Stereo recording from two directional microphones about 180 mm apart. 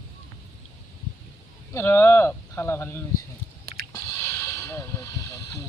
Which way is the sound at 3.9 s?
15° left (ahead or behind).